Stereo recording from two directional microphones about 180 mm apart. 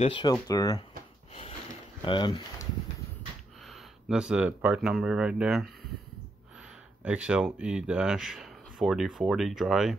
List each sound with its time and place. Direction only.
0.0 s speech: 25° left (ahead or behind)
2.0 s speech: 25° left (ahead or behind)
4.1 s speech: 5° right (ahead or behind)
7.1 s speech: 5° right (ahead or behind)